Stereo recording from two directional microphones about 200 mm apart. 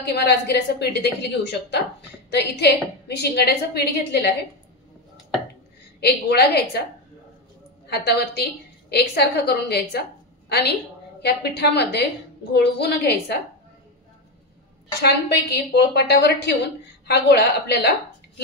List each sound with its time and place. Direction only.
0.0 s a woman's voice: 55° left (ahead or behind)
5.9 s a woman's voice: 55° left (ahead or behind)
7.8 s a woman's voice: 55° left (ahead or behind)
15.0 s a woman's voice: 55° left (ahead or behind)